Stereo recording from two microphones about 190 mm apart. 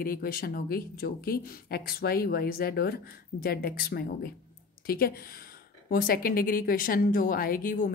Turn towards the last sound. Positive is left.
turn(degrees=45)  # may be behind; listen again after turning